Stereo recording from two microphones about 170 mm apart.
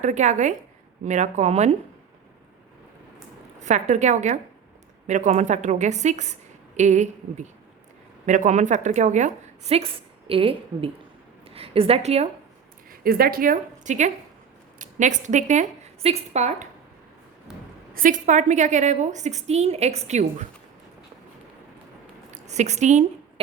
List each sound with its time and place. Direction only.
0.0 s a woman's voice: 45° right (ahead or behind)
3.6 s a woman's voice: 45° right (ahead or behind)
12.9 s a woman's voice: 60° right (ahead or behind); by 16.6 s 40° right (ahead or behind)
17.5 s a sound: 5° right (ahead or behind)
17.9 s a woman's voice: 50° right (ahead or behind)
22.3 s a woman's voice: 40° right (ahead or behind)